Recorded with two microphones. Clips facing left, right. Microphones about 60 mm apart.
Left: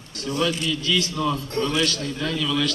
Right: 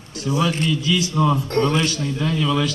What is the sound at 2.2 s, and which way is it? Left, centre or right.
Speech, right.